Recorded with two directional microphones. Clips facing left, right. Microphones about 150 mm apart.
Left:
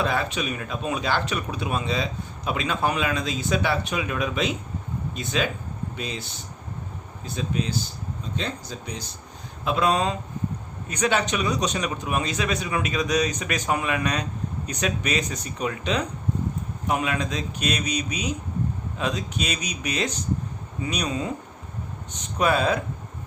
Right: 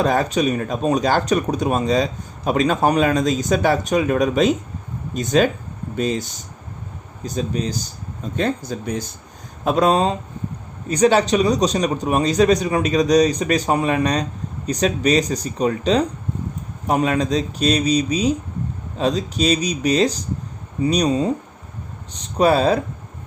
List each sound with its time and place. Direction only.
0.0 s speech: 40° right (ahead or behind)
9.6 s a man's voice: 40° right (ahead or behind)